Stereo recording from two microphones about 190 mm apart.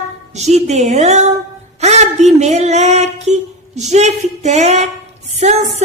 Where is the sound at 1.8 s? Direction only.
35° right (ahead or behind).